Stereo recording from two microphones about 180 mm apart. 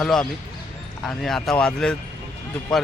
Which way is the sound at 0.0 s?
5° left (ahead or behind).